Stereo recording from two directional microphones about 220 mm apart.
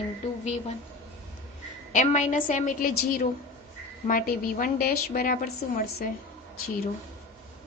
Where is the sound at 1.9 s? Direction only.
35° left (ahead or behind).